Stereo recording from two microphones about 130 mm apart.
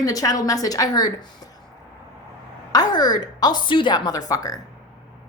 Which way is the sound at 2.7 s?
30° left (ahead or behind).